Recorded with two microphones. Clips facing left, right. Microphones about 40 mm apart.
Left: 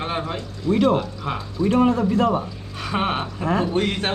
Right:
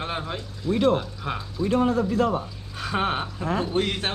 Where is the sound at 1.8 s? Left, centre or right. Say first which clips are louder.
Left 3 dB; left.